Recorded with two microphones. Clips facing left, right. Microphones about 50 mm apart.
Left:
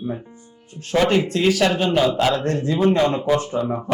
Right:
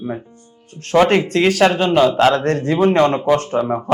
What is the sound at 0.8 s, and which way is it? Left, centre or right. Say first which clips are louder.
Speech: right 4 dB; right.